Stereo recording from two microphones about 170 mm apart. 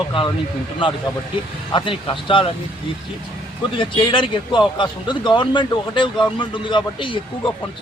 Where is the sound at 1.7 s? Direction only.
30° left (ahead or behind).